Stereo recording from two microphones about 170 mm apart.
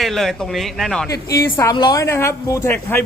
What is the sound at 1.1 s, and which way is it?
A woman's voice, 20° left (ahead or behind).